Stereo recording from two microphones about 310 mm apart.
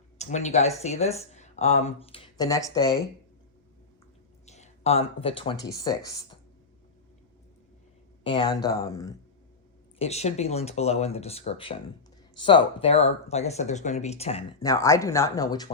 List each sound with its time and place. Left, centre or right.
0.2 s speech: left
4.4 s speech: left
8.2 s speech: centre